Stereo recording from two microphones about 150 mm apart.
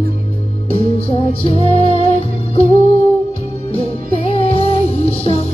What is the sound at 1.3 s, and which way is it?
Music, 40° left (ahead or behind).